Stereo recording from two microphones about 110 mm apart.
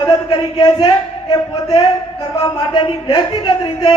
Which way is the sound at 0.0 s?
40° left (ahead or behind).